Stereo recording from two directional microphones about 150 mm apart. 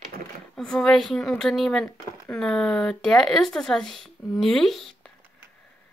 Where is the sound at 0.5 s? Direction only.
5° left (ahead or behind).